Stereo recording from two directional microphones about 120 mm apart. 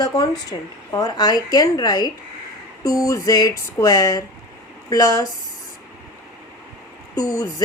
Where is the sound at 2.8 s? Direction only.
30° left (ahead or behind).